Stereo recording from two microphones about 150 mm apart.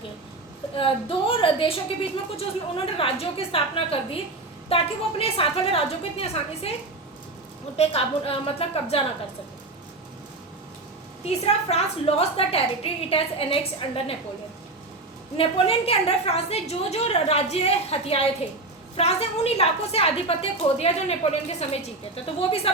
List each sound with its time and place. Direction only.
0.8 s a woman's voice: 35° left (ahead or behind)
7.8 s a woman's voice: 40° left (ahead or behind)
11.3 s a woman's voice: 45° left (ahead or behind)
15.4 s a woman's voice: 40° left (ahead or behind)